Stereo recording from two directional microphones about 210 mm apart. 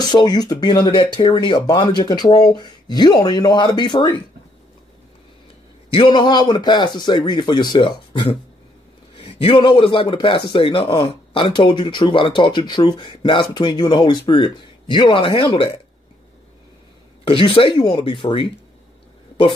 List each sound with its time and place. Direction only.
0.0 s a man's voice: 20° left (ahead or behind)
5.9 s a man's voice: 20° left (ahead or behind)
17.2 s a man's voice: 25° left (ahead or behind)